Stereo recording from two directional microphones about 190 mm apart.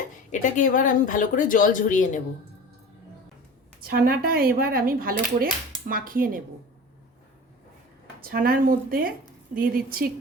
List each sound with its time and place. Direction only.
0.3 s speech: 45° left (ahead or behind)
3.8 s speech: 50° right (ahead or behind)
8.2 s speech: 50° right (ahead or behind)